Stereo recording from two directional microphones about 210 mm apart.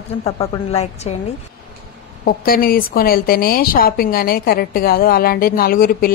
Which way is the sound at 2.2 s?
45° left (ahead or behind).